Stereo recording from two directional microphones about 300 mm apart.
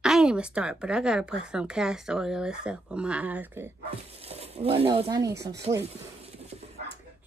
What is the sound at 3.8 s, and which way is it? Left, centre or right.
Speech, centre.